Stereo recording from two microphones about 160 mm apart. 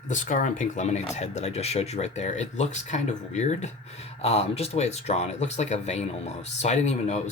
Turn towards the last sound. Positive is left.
turn(degrees=45)  # may be behind; listen again after turning